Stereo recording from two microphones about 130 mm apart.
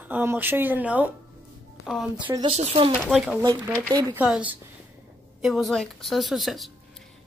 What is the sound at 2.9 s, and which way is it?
Speech, centre (ahead or behind).